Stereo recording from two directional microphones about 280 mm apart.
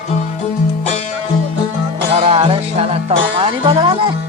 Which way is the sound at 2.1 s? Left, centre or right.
Right.